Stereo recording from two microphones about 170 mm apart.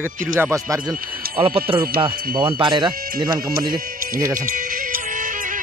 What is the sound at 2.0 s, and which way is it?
Speech, 25° right (ahead or behind).